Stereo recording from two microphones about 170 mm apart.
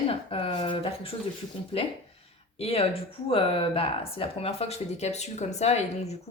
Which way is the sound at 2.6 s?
35° left (ahead or behind).